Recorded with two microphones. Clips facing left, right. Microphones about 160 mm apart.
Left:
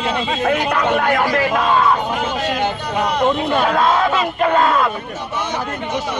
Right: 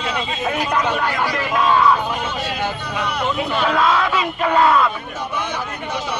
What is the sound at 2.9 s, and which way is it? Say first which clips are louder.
A man's voice: left 6 dB; 45° left (ahead or behind).